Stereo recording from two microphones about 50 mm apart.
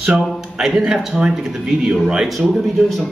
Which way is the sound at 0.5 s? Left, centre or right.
Centre.